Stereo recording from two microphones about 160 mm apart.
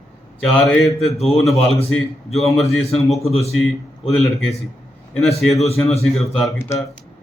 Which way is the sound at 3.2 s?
40° left (ahead or behind).